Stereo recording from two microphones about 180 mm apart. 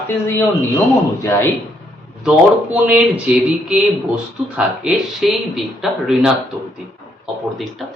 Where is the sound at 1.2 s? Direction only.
15° left (ahead or behind).